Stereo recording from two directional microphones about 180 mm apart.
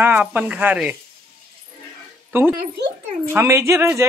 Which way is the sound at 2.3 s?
10° right (ahead or behind).